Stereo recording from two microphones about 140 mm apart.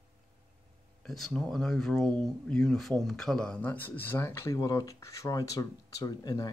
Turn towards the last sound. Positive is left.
turn(degrees=25)  # may be behind; listen again after turning